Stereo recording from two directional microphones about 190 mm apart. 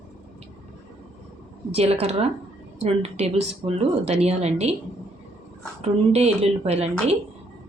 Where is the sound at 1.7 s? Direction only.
35° right (ahead or behind).